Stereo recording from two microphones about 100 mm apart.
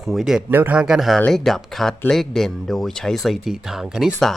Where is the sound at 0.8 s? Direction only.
5° right (ahead or behind).